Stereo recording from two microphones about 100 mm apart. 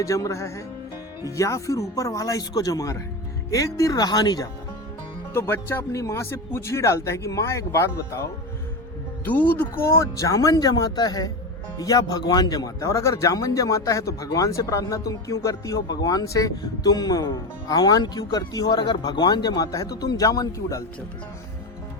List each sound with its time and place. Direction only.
0.0 s speech: 30° left (ahead or behind)
5.3 s speech: 25° left (ahead or behind)
9.2 s speech: 15° left (ahead or behind); by 20.8 s 30° left (ahead or behind)